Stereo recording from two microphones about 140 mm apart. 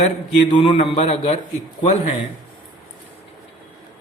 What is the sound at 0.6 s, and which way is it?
Speech, 40° left (ahead or behind).